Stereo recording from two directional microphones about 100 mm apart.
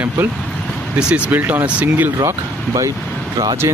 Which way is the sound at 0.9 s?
10° right (ahead or behind).